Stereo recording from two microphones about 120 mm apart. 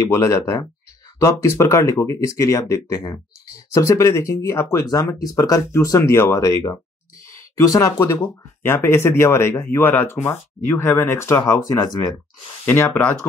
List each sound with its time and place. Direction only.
0.1 s speech: 25° left (ahead or behind)
12.6 s speech: 15° left (ahead or behind)